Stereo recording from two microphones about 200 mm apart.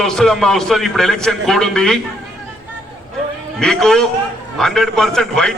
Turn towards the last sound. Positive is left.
turn(degrees=0)  # may be behind; listen again after turning